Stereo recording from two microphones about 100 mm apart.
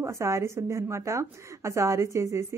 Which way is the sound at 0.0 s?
30° right (ahead or behind).